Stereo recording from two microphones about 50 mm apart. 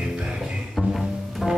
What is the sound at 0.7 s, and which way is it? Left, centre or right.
Double bass, centre.